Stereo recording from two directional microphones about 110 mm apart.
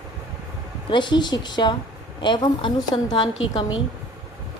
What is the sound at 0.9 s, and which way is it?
A woman's voice, 45° left (ahead or behind).